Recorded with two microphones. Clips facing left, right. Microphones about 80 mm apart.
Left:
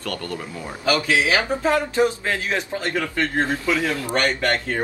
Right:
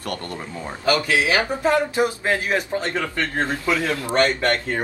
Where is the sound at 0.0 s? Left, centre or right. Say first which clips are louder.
Left 1 dB; right.